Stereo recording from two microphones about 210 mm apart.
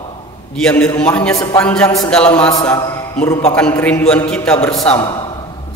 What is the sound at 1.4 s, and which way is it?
Speech, 15° left (ahead or behind).